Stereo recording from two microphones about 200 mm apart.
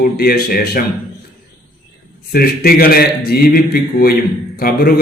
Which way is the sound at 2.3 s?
50° left (ahead or behind).